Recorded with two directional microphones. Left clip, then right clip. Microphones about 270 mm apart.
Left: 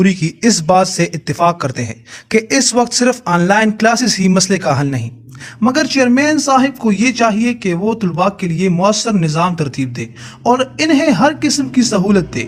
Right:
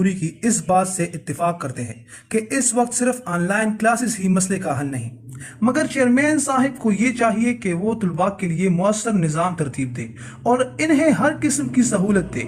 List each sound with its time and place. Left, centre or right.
0.0 s a man's voice: left
5.7 s a man's voice: left